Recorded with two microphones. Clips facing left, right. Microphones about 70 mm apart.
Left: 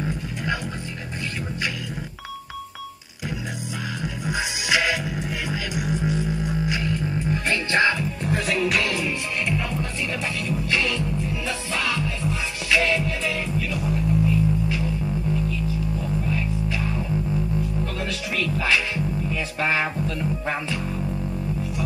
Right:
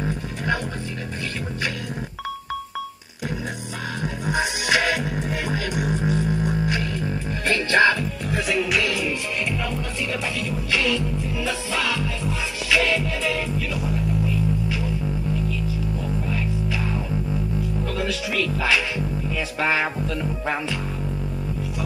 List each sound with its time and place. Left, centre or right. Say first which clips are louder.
4.0 s music: right 4 dB; right
7.4 s music: right 4 dB; left
8.5 s music: even; left
10.7 s music: right 3 dB; left
12.7 s music: even; left
18.0 s music: right 2 dB; left